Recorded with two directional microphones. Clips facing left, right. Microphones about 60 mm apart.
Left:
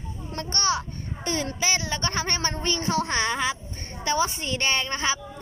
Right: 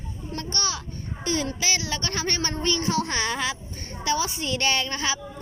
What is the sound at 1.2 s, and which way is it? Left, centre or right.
Child singing, left.